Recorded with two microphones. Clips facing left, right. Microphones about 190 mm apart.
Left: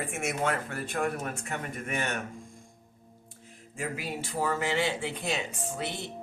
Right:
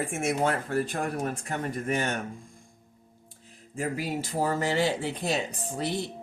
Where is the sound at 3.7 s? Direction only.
40° right (ahead or behind).